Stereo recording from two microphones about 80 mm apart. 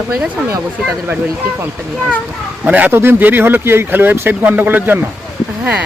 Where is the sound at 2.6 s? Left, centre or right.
Centre.